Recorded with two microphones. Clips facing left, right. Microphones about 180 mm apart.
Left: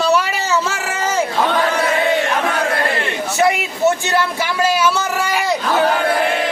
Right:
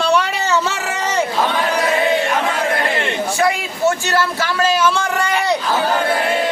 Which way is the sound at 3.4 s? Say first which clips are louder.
Left 3 dB; 20° left (ahead or behind).